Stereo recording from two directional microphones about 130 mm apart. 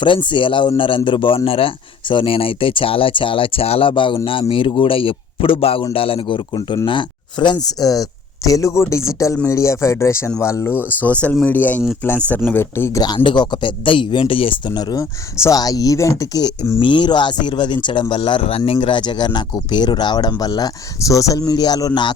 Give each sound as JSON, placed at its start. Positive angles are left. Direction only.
{"t": 0.0, "sound": "speech", "side_deg": 40}
{"t": 13.0, "sound": "speech", "side_deg": 35}